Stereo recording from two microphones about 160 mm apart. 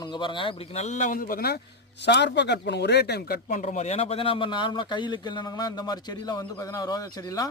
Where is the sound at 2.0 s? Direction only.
90° left.